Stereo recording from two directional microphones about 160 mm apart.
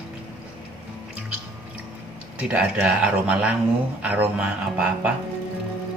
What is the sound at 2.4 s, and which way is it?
Speech, 10° right (ahead or behind).